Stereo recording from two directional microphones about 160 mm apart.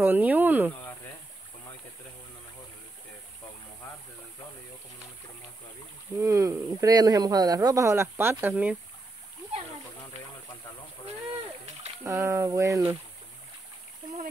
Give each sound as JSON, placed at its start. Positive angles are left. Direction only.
{"t": 0.0, "sound": "speech", "side_deg": -10}
{"t": 6.2, "sound": "speech", "side_deg": -20}
{"t": 12.0, "sound": "speech", "side_deg": -20}